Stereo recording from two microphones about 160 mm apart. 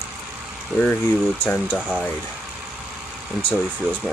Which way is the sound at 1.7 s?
5° right (ahead or behind).